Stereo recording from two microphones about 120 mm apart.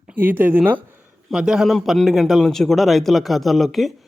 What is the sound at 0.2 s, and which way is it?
A man's voice, 15° right (ahead or behind).